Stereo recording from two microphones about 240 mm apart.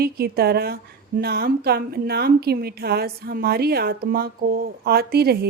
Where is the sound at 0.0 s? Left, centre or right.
Right.